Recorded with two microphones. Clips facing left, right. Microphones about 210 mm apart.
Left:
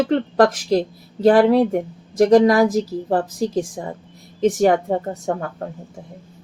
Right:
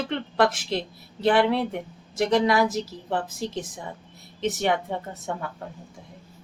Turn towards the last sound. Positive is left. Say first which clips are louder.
# left 8 dB
turn(degrees=45)  # may be behind; listen again after turning